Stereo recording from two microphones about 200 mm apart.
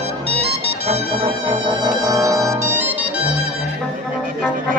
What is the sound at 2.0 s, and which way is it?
Music, 20° right (ahead or behind).